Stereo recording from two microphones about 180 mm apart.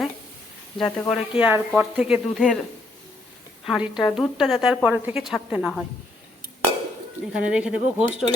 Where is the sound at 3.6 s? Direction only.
Centre (ahead or behind).